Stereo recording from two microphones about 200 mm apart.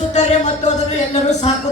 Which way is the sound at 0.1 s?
35° left (ahead or behind).